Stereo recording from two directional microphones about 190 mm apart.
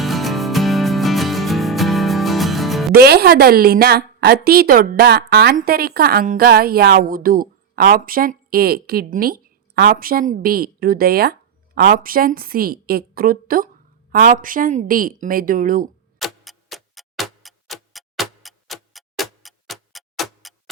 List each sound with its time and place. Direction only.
0.0 s music: centre (ahead or behind)
2.9 s a woman's voice: 55° right (ahead or behind)
16.1 s tick-tock: centre (ahead or behind)